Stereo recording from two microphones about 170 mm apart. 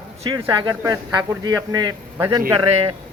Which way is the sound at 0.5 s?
25° right (ahead or behind).